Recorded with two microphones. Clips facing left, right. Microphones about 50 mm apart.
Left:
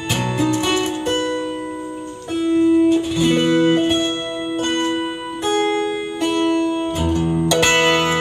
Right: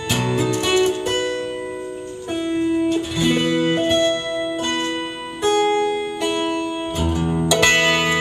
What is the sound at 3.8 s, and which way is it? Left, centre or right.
Music, centre.